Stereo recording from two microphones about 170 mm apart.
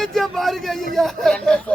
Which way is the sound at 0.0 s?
Centre (ahead or behind).